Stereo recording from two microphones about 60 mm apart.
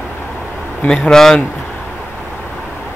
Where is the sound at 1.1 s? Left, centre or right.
Centre.